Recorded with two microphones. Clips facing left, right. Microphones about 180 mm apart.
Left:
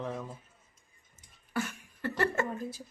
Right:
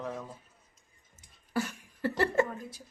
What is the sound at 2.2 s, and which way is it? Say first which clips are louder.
Speech: right 4 dB; 15° right (ahead or behind).